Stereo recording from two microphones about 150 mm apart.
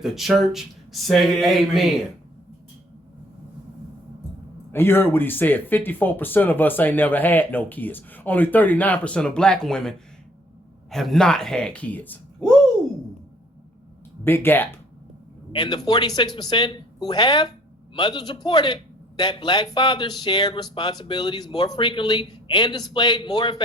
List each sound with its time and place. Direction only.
0.0 s speech: centre (ahead or behind)
4.7 s speech: 15° left (ahead or behind)
10.9 s speech: centre (ahead or behind)
14.3 s speech: 15° left (ahead or behind)
15.5 s a man's voice: 30° left (ahead or behind)